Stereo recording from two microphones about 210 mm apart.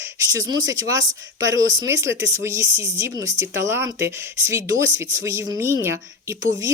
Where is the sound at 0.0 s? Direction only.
15° right (ahead or behind).